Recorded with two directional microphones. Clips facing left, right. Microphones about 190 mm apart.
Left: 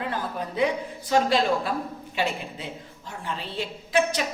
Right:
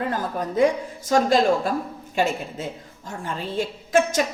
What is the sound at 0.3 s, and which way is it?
A woman's voice, 45° right (ahead or behind).